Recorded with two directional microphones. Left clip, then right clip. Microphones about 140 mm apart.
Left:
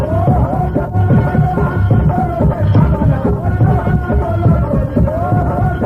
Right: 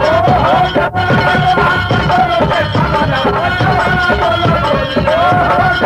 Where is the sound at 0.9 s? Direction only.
25° right (ahead or behind).